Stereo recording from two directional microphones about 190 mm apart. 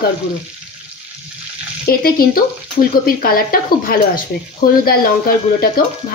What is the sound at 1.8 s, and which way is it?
A woman's voice, 50° left (ahead or behind).